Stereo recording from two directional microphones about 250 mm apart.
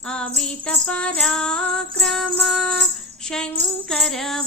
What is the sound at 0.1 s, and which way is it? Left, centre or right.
Music, centre.